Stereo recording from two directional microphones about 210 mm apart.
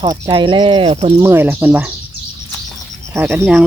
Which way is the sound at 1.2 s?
10° right (ahead or behind).